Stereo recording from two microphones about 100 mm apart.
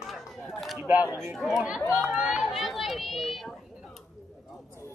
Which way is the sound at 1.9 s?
5° right (ahead or behind).